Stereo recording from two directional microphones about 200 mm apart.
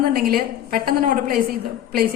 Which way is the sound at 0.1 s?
45° right (ahead or behind).